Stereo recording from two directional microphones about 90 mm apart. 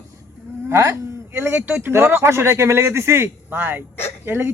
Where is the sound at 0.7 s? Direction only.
35° right (ahead or behind).